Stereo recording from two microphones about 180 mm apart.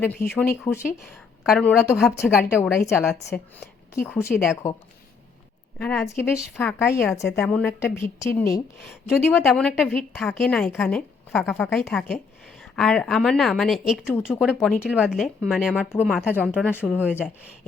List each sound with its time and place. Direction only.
0.0 s speech: 10° left (ahead or behind)
1.5 s a woman's voice: 5° left (ahead or behind)
2.2 s speech: 10° left (ahead or behind)
5.8 s a woman's voice: 5° left (ahead or behind)